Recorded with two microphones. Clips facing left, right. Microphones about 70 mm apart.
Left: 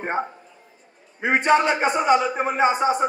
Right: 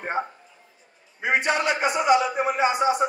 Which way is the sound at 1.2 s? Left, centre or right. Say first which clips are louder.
Left 4 dB; left.